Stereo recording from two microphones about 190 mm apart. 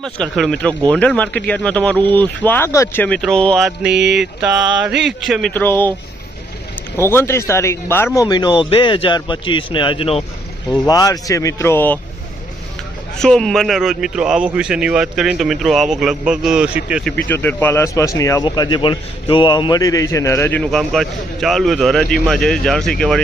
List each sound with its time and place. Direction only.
0.0 s a man's voice: centre (ahead or behind)
5.5 s speech: 10° left (ahead or behind)
7.0 s a man's voice: 10° left (ahead or behind); by 10.2 s 30° left (ahead or behind)
10.7 s speech: 20° left (ahead or behind)
13.1 s a man's voice: 5° left (ahead or behind)